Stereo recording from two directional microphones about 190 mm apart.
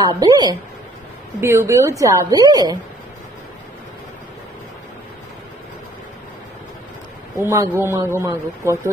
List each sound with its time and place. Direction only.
0.0 s a woman's voice: 20° right (ahead or behind)
7.4 s a woman's voice: 15° right (ahead or behind)